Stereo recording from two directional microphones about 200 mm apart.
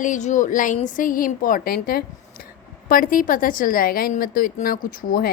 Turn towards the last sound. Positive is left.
turn(degrees=45)  # may be behind; listen again after turning